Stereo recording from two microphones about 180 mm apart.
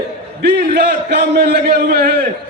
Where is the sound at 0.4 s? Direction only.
65° right (ahead or behind).